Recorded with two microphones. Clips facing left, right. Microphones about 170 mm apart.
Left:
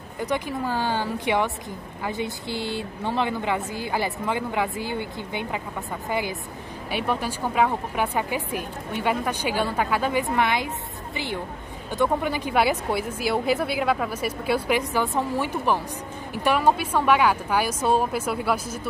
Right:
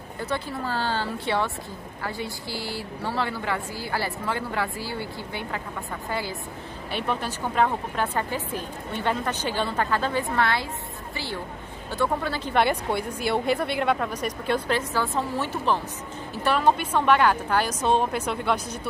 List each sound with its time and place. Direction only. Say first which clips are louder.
0.2 s a woman's voice: left 3 dB; 15° left (ahead or behind)
11.9 s a woman's voice: left 3 dB; 15° left (ahead or behind)